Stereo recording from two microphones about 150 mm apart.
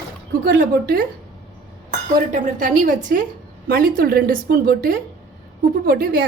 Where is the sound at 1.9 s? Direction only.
55° right (ahead or behind).